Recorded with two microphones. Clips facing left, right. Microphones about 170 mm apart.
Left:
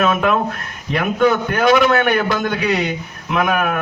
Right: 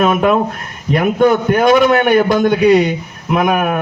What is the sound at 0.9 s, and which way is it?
Speech, 45° right (ahead or behind).